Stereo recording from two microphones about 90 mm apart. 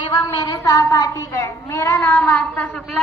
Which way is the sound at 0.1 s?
45° left (ahead or behind).